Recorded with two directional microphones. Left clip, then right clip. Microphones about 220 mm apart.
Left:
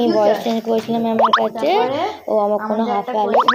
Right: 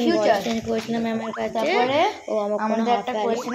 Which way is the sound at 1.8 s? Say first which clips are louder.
Even; 40° right (ahead or behind).